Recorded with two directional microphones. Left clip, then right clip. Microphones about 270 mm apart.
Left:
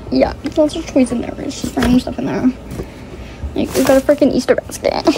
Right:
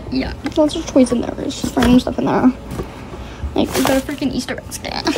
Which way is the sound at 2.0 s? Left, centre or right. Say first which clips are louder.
Right 3 dB; centre.